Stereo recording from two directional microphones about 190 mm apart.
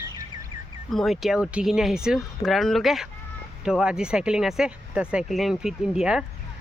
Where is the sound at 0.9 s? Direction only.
Centre (ahead or behind).